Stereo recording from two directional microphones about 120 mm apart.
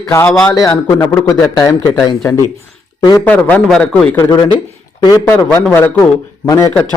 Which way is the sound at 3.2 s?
10° left (ahead or behind).